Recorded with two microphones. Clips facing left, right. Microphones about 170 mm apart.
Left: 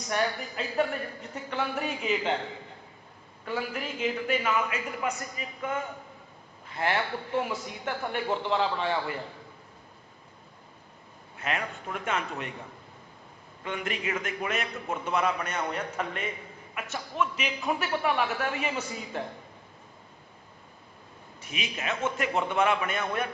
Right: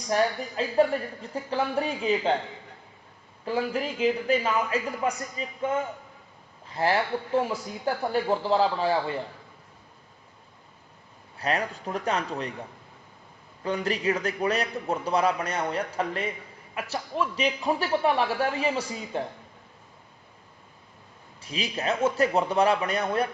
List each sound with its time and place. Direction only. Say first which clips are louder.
0.1 s speech: right 4 dB; 30° right (ahead or behind)
3.4 s speech: right 5 dB; 30° right (ahead or behind)
11.3 s speech: right 5 dB; 35° right (ahead or behind)
13.7 s speech: right 6 dB; 35° right (ahead or behind)
21.4 s speech: right 5 dB; 35° right (ahead or behind)